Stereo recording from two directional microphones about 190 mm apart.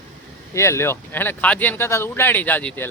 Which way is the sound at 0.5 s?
15° left (ahead or behind).